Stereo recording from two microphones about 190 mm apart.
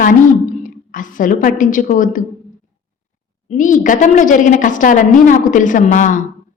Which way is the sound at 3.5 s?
40° left (ahead or behind).